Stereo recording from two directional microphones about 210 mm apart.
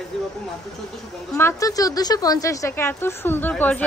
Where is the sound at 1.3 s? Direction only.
15° left (ahead or behind).